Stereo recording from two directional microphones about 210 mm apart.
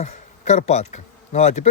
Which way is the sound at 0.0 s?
30° left (ahead or behind).